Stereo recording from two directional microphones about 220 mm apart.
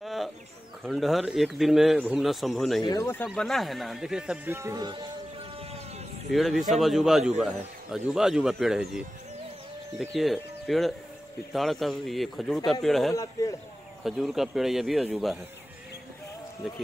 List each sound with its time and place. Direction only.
0.0 s chicken: centre (ahead or behind)
0.8 s a man's voice: centre (ahead or behind)
2.8 s a man's voice: 15° left (ahead or behind)
3.3 s a man's voice: centre (ahead or behind); by 5.0 s 20° right (ahead or behind)
6.3 s a man's voice: centre (ahead or behind)
13.1 s a man's voice: 15° left (ahead or behind)
14.0 s a man's voice: centre (ahead or behind)